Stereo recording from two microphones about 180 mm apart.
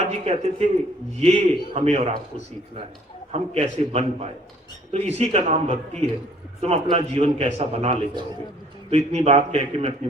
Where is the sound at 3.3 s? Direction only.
35° right (ahead or behind).